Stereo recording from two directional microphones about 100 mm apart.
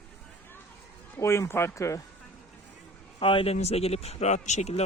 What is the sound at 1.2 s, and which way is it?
Speech, 30° left (ahead or behind).